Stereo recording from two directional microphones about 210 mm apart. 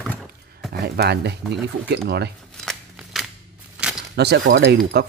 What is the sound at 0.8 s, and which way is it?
Speech, 50° right (ahead or behind).